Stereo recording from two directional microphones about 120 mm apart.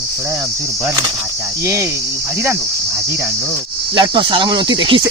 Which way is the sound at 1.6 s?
25° right (ahead or behind).